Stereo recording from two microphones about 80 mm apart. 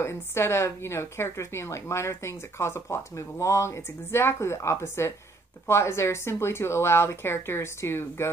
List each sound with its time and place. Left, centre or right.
0.0 s a woman's voice: left